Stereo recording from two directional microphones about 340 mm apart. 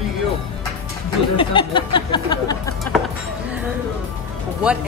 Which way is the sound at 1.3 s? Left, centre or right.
Centre.